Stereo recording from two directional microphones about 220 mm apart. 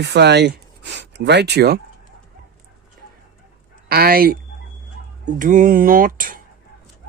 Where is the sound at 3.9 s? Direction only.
45° right (ahead or behind).